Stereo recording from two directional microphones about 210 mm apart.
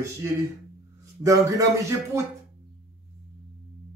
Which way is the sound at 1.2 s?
15° right (ahead or behind).